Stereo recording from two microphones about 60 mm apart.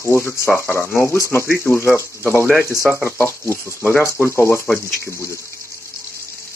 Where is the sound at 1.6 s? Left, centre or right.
Left.